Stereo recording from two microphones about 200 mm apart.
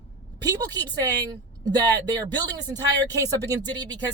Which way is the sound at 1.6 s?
20° right (ahead or behind).